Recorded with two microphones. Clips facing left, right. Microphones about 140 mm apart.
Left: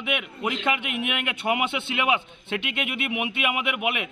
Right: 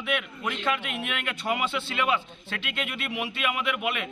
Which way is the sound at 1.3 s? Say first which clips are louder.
Left 2 dB; 60° left (ahead or behind).